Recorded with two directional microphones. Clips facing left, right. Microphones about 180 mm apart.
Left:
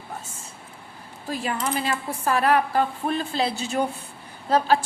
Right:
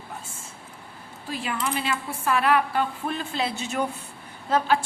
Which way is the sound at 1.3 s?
40° left (ahead or behind).